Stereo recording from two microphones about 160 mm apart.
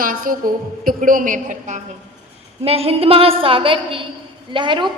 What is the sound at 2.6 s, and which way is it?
A woman's voice, 40° right (ahead or behind).